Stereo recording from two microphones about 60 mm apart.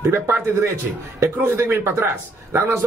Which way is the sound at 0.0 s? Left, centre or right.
Right.